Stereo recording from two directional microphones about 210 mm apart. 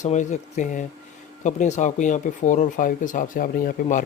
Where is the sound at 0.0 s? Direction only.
35° left (ahead or behind).